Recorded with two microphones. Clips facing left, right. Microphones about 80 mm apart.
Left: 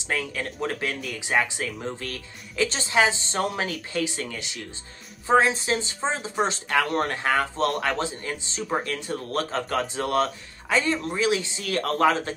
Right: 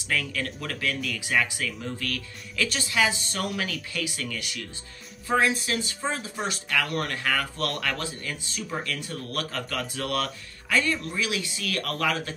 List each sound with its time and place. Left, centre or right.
0.1 s speech: left